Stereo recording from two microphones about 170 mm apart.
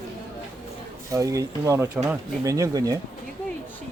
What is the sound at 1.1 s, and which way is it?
Speech, 20° right (ahead or behind).